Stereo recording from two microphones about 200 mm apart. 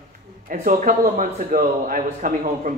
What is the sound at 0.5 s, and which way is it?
A man's voice, 40° right (ahead or behind).